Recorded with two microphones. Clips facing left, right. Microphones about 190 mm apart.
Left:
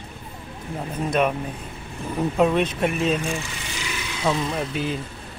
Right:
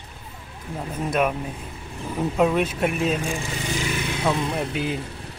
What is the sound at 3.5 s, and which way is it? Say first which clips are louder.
Vehicle: right 6 dB; 40° right (ahead or behind).